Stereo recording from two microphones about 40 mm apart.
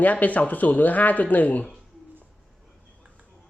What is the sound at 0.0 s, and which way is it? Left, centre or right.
Speech, left.